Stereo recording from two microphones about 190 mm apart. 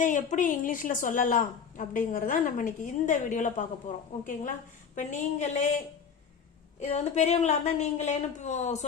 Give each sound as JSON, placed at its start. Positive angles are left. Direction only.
{"t": 0.0, "sound": "a woman's voice", "side_deg": 40}
{"t": 6.7, "sound": "a woman's voice", "side_deg": 35}